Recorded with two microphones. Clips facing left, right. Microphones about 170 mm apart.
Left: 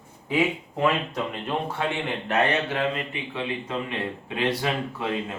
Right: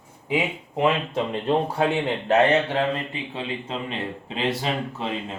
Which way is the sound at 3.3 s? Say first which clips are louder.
Left 2 dB; 25° right (ahead or behind).